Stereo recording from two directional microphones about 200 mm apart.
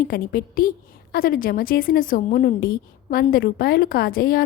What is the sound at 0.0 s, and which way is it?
A woman's voice, 45° left (ahead or behind).